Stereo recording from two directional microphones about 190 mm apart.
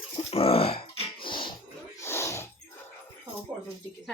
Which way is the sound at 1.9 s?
15° left (ahead or behind).